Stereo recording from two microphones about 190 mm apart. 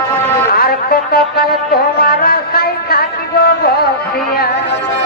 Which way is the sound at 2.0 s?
50° left (ahead or behind).